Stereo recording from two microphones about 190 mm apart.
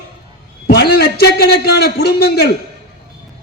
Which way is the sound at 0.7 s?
55° left (ahead or behind).